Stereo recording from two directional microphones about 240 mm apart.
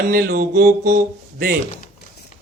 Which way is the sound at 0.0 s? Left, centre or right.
Right.